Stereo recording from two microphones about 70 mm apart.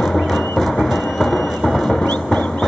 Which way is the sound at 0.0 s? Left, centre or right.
Centre.